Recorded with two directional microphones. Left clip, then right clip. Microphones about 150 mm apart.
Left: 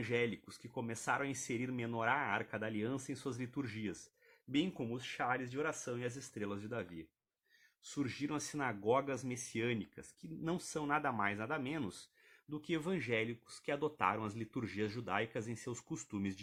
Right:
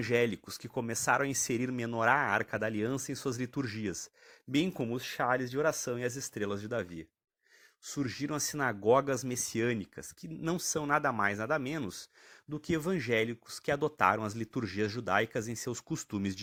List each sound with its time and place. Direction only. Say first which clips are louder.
0.0 s speech: right 7 dB; 45° right (ahead or behind)
7.9 s speech: right 5 dB; 35° right (ahead or behind)